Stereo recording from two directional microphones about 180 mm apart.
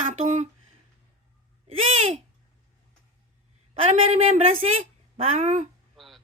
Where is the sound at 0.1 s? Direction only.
40° right (ahead or behind).